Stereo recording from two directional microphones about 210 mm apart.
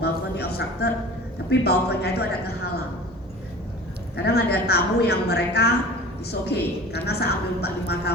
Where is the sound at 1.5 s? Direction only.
50° left (ahead or behind).